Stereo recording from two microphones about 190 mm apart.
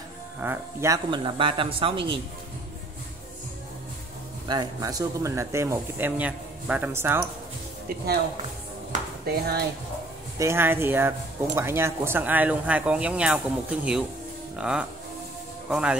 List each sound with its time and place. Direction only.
0.4 s speech: 10° right (ahead or behind); by 2.0 s 30° right (ahead or behind)
4.5 s speech: 20° right (ahead or behind)
9.3 s speech: 55° right (ahead or behind)
10.4 s speech: 10° right (ahead or behind)